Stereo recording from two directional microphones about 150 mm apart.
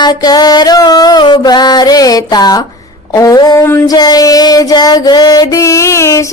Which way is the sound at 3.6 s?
15° left (ahead or behind).